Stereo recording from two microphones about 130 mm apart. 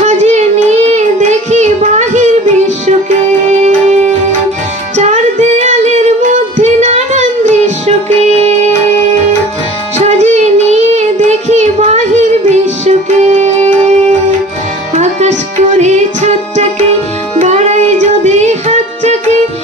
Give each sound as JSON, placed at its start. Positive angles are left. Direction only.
{"t": 0.0, "sound": "child singing", "side_deg": -65}
{"t": 1.5, "sound": "music", "side_deg": -60}
{"t": 4.9, "sound": "music", "side_deg": -65}
{"t": 9.9, "sound": "child singing", "side_deg": -65}
{"t": 15.0, "sound": "music", "side_deg": -60}